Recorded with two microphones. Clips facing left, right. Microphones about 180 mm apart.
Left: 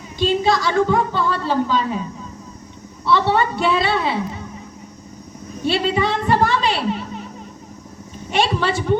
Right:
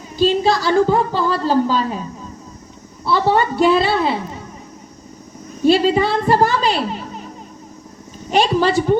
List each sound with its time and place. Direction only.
0.2 s a woman's voice: 35° right (ahead or behind)
3.1 s a woman's voice: 35° right (ahead or behind)
5.6 s a woman's voice: 40° right (ahead or behind)
8.3 s a woman's voice: 40° right (ahead or behind)